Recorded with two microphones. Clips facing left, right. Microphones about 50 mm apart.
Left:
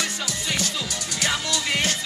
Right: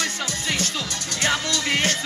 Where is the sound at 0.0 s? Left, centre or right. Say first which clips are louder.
Right 2 dB; right.